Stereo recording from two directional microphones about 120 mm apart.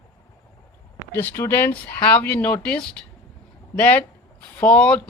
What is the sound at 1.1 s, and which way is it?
Speech, 15° left (ahead or behind).